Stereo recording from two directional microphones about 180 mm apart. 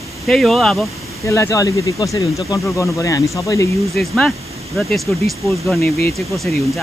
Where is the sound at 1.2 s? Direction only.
15° left (ahead or behind).